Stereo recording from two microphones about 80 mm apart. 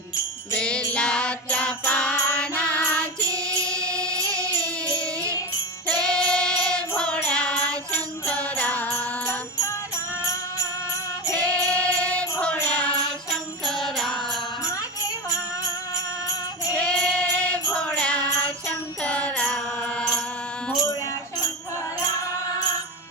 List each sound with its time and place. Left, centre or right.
0.5 s jingle bell: centre
0.9 s music: centre
11.3 s music: centre
13.7 s music: centre
16.7 s music: centre